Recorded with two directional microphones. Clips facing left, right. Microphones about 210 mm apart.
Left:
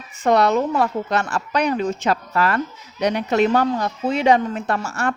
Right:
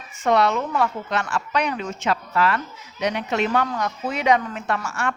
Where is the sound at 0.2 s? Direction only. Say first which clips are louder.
Left 3 dB; 40° left (ahead or behind).